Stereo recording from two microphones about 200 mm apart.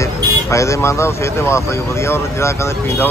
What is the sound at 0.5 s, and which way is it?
Speech, 15° left (ahead or behind).